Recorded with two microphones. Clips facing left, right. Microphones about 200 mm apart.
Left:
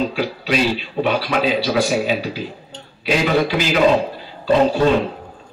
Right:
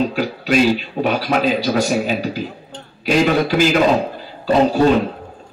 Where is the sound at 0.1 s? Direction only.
45° right (ahead or behind).